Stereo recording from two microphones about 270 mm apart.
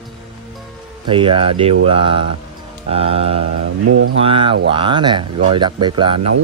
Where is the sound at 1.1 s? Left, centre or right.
Centre.